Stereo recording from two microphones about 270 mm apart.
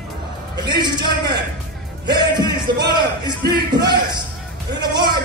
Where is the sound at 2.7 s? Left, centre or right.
Right.